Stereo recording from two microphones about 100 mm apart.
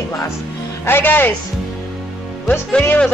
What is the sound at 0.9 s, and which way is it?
Speech, 20° left (ahead or behind).